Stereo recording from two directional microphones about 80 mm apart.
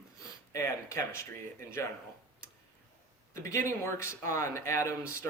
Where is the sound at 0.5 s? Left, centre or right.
Left.